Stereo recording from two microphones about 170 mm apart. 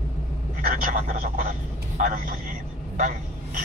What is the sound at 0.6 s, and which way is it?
Speech, 50° right (ahead or behind).